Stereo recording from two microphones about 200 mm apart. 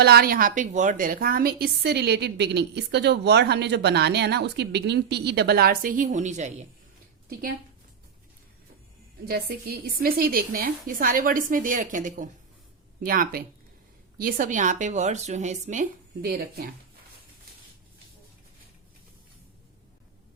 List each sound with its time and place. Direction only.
0.0 s a woman's voice: 50° right (ahead or behind)
9.2 s a woman's voice: 50° right (ahead or behind)